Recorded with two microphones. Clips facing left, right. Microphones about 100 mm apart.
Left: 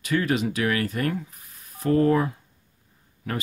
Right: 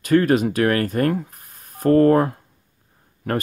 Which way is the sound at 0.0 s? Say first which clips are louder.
Right 7 dB; 50° right (ahead or behind).